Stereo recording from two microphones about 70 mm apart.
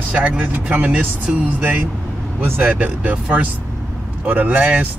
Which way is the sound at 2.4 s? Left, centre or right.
Right.